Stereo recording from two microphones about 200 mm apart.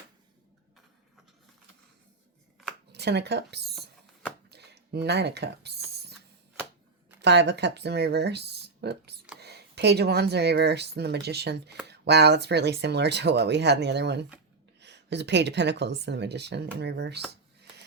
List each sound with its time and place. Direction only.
2.9 s speech: 55° right (ahead or behind)
7.2 s speech: 60° right (ahead or behind)